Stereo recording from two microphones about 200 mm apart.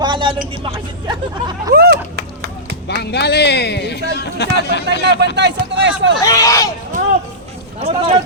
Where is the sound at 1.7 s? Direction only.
50° right (ahead or behind).